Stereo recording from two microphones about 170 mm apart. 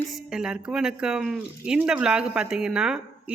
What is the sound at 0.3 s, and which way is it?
Speech, 5° right (ahead or behind).